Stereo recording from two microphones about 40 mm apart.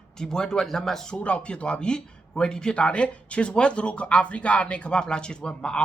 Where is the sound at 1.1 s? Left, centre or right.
Left.